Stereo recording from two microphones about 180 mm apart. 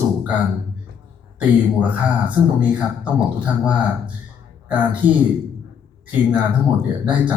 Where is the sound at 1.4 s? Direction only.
10° right (ahead or behind).